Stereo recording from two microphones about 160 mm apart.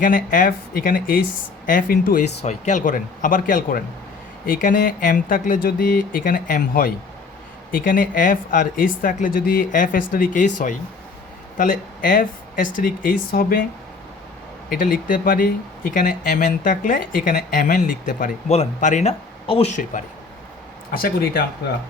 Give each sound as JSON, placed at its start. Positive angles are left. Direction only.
{"t": 0.0, "sound": "speech", "side_deg": 60}
{"t": 2.4, "sound": "speech", "side_deg": 45}
{"t": 14.7, "sound": "speech", "side_deg": 60}
{"t": 20.9, "sound": "speech", "side_deg": 70}